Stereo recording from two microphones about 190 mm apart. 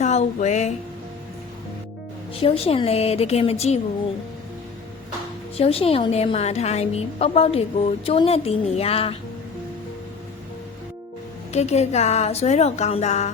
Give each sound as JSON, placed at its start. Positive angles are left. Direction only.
{"t": 0.0, "sound": "a sound", "side_deg": 35}
{"t": 2.3, "sound": "a woman's voice", "side_deg": 30}
{"t": 5.5, "sound": "a woman's voice", "side_deg": 30}
{"t": 11.5, "sound": "a woman's voice", "side_deg": 35}